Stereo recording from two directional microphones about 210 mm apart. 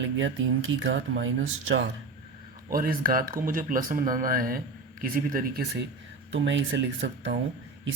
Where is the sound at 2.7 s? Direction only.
45° right (ahead or behind).